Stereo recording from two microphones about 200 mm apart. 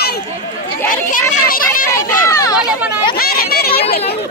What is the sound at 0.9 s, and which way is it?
Speech, 45° left (ahead or behind).